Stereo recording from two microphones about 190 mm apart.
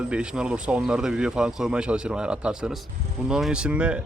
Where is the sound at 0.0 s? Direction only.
5° right (ahead or behind).